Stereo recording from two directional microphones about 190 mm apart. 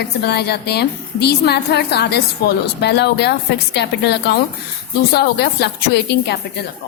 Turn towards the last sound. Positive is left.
turn(degrees=65)  # may be behind; listen again after turning